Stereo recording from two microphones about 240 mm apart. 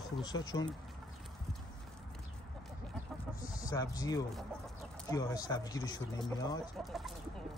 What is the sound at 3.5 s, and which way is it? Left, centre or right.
Speech, centre.